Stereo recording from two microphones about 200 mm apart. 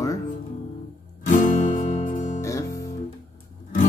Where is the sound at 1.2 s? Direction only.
40° left (ahead or behind).